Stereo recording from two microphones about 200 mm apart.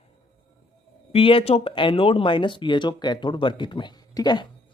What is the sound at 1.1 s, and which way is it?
Speech, 30° left (ahead or behind).